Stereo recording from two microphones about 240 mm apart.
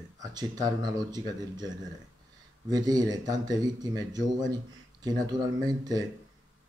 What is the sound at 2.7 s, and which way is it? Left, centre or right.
Speech, centre.